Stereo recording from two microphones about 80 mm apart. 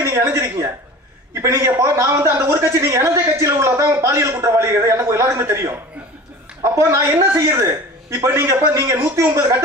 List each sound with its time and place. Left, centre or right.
0.0 s a woman's voice: right